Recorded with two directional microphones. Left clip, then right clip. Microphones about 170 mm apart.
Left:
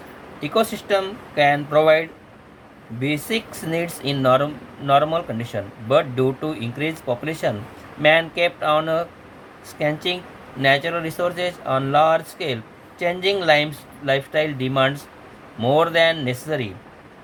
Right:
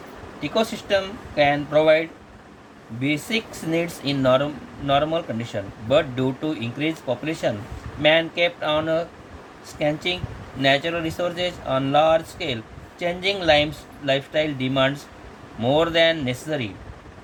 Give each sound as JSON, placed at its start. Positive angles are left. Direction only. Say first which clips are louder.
{"t": 0.3, "sound": "speech", "louder": "left 3 dB", "side_deg": 25}